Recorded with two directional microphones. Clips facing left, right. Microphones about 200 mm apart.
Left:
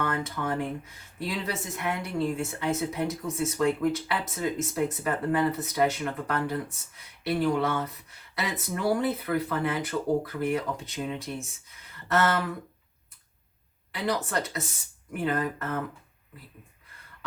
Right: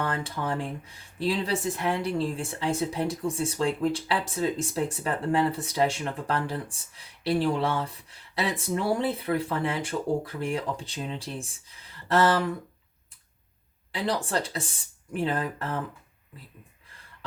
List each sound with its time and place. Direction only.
0.0 s speech: 30° right (ahead or behind)
13.9 s speech: 30° right (ahead or behind)